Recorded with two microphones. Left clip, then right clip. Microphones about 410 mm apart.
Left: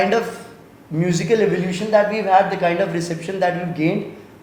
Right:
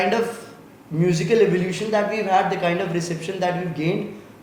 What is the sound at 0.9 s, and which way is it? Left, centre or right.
Speech, left.